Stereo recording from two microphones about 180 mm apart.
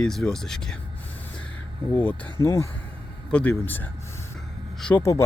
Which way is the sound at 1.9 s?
10° left (ahead or behind).